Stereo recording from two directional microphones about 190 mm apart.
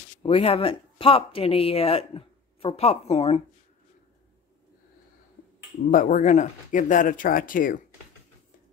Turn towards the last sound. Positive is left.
turn(degrees=45)  # may be behind; listen again after turning